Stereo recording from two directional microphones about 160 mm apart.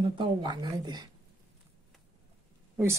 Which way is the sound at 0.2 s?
30° right (ahead or behind).